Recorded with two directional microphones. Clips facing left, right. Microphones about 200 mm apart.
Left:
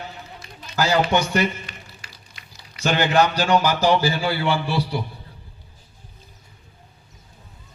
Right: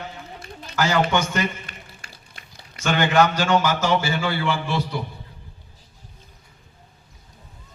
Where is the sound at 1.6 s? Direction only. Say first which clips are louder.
Left 1 dB; 50° right (ahead or behind).